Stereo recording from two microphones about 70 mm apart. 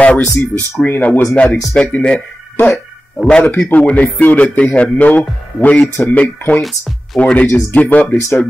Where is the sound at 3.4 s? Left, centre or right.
Left.